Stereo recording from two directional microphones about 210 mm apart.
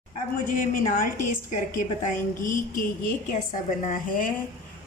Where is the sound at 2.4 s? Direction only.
40° left (ahead or behind).